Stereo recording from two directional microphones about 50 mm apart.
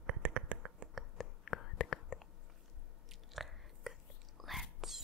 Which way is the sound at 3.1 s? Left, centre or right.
Centre.